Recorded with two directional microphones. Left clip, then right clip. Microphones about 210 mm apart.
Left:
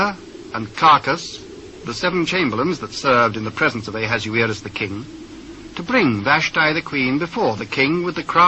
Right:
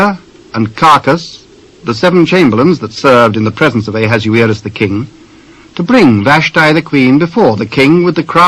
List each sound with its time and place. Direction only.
0.0 s speech: 30° right (ahead or behind)